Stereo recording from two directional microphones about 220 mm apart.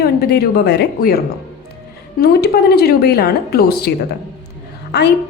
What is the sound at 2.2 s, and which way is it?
A woman's voice, 45° left (ahead or behind).